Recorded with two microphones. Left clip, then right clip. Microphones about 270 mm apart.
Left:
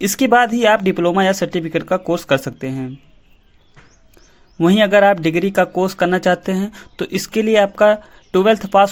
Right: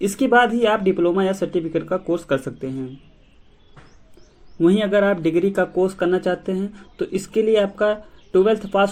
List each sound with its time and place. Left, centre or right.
0.0 s speech: left
4.6 s speech: left